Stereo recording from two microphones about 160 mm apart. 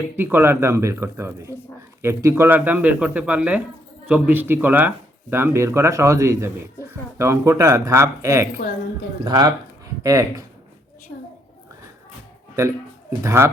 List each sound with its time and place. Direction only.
0.2 s speech: 15° right (ahead or behind)
13.2 s speech: 15° right (ahead or behind)